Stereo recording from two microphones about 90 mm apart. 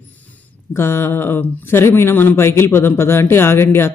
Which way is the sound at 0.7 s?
25° left (ahead or behind).